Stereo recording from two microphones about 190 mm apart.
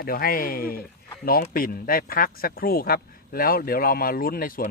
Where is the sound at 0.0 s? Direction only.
50° left (ahead or behind).